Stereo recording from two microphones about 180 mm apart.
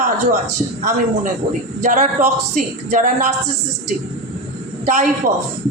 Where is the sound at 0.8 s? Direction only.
40° right (ahead or behind).